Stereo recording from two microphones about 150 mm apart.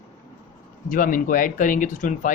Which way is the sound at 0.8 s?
65° left (ahead or behind).